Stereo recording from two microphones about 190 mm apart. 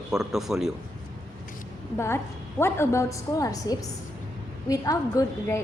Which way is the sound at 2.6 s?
15° left (ahead or behind).